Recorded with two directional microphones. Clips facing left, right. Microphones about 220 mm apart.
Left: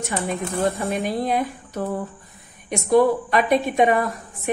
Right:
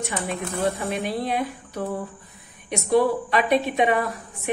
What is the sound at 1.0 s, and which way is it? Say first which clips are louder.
Speech: left 3 dB; 45° left (ahead or behind).